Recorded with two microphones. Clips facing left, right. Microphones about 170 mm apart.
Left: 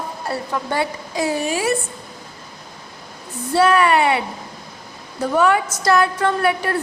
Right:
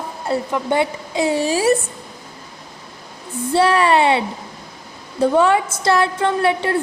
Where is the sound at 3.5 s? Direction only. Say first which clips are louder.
Even; 30° right (ahead or behind).